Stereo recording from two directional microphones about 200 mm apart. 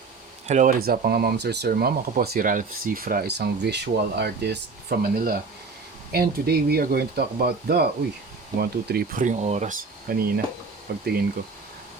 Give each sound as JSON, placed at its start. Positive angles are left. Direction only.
{"t": 0.4, "sound": "speech", "side_deg": -40}